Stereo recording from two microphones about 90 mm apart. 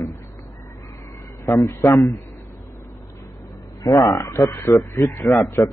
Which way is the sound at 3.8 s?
40° left (ahead or behind).